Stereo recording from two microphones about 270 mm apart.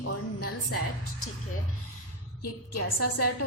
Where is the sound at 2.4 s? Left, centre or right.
Left.